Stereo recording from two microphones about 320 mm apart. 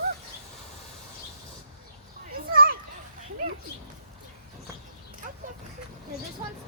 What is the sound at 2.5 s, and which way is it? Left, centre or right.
Children playing, right.